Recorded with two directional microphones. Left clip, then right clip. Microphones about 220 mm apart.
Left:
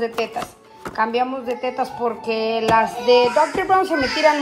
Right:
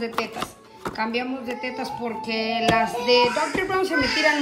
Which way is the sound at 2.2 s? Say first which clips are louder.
Left 1 dB; 10° right (ahead or behind).